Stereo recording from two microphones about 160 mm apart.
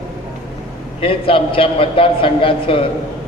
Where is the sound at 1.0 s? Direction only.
35° left (ahead or behind).